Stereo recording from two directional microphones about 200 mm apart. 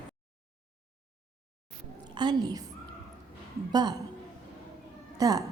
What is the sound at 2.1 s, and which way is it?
Speech, 20° right (ahead or behind).